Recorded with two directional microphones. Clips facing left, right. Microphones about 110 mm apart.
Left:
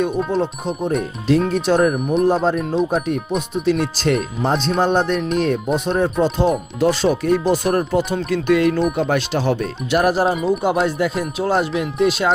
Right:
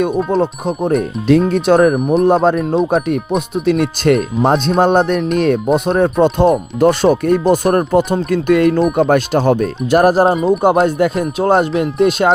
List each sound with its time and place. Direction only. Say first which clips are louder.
0.6 s speech: right 5 dB; 55° right (ahead or behind)
2.2 s speech: right 5 dB; 65° right (ahead or behind); by 10.5 s 40° right (ahead or behind)
10.6 s speech: right 6 dB; 50° right (ahead or behind)